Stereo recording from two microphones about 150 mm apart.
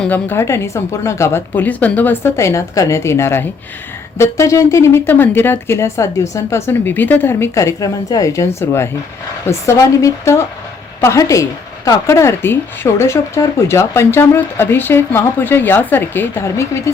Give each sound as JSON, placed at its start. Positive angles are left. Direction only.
{"t": 0.0, "sound": "speech", "side_deg": 15}